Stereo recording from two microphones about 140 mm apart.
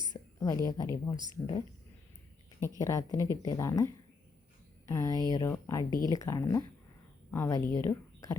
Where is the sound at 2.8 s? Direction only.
25° left (ahead or behind).